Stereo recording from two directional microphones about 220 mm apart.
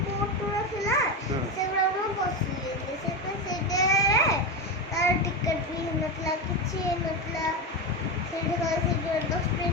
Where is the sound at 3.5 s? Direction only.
15° left (ahead or behind).